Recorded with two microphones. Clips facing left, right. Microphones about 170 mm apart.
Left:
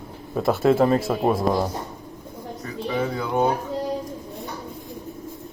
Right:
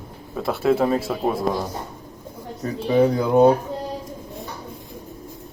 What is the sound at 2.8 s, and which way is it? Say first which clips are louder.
Speech: right 8 dB; 40° right (ahead or behind).